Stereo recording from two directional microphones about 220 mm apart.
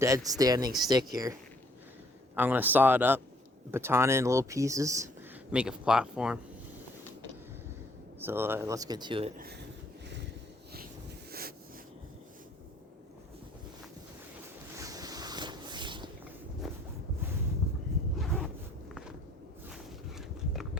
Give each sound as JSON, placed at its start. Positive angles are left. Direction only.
{"t": 0.0, "sound": "speech", "side_deg": -15}
{"t": 8.2, "sound": "speech", "side_deg": -10}
{"t": 11.3, "sound": "a sound", "side_deg": -45}
{"t": 14.8, "sound": "boat", "side_deg": -15}
{"t": 18.2, "sound": "zipper", "side_deg": 0}
{"t": 19.7, "sound": "a sound", "side_deg": 0}